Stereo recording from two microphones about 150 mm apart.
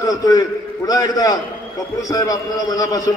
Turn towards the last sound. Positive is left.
turn(degrees=25)  # may be behind; listen again after turning